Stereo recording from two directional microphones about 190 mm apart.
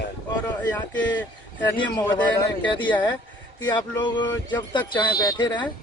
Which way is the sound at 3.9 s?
25° left (ahead or behind).